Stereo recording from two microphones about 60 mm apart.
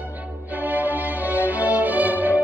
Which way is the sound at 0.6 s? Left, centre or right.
Right.